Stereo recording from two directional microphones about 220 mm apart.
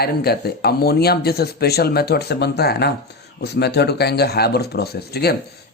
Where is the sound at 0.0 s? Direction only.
45° left (ahead or behind).